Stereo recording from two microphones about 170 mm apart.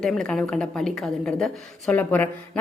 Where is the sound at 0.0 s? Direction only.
5° left (ahead or behind).